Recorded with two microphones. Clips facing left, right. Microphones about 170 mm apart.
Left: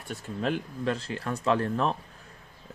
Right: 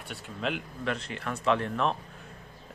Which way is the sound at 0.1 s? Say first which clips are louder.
Left 4 dB; 40° left (ahead or behind).